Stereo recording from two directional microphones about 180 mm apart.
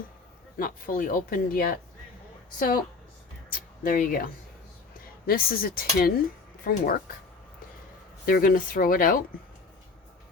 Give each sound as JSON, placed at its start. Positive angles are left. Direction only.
{"t": 0.5, "sound": "speech", "side_deg": 50}
{"t": 3.5, "sound": "speech", "side_deg": 50}
{"t": 8.3, "sound": "speech", "side_deg": 50}